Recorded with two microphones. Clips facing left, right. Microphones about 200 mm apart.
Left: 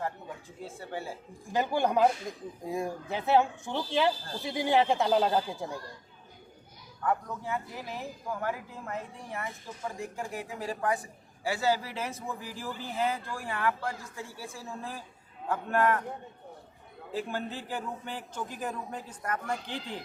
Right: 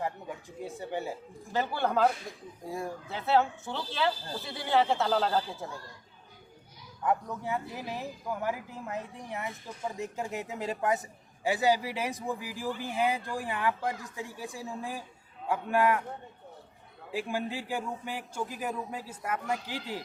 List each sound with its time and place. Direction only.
0.6 s speech: 15° right (ahead or behind)
1.5 s speech: 15° left (ahead or behind)
7.0 s a woman's voice: 20° right (ahead or behind)
17.1 s speech: 10° right (ahead or behind)